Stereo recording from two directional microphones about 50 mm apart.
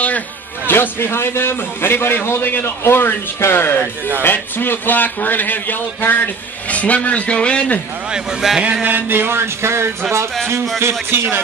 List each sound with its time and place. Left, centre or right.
0.7 s a man's voice: left
8.4 s speech: centre
8.8 s a sound: right
10.8 s a man's voice: right